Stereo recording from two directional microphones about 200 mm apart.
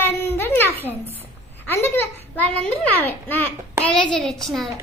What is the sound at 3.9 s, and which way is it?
Speech, centre (ahead or behind).